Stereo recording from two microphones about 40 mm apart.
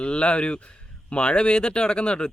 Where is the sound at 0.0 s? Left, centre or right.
Left.